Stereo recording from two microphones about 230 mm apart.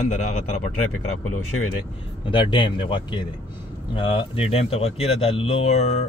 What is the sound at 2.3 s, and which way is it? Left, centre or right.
Speech, left.